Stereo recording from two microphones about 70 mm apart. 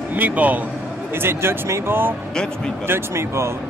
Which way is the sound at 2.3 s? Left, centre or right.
Centre.